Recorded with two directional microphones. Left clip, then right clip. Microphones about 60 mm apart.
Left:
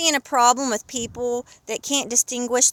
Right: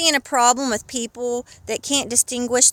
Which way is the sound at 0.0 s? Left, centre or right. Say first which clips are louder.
Right 1 dB; right.